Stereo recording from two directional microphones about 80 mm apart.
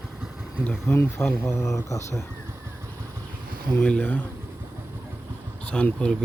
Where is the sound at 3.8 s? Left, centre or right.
Centre.